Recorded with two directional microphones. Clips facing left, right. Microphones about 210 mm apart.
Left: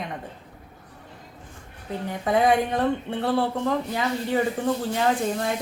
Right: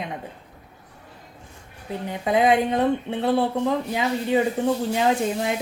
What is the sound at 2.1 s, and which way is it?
Speech, 20° right (ahead or behind).